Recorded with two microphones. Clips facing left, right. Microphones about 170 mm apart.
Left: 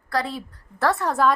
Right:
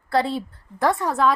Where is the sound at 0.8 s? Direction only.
15° right (ahead or behind).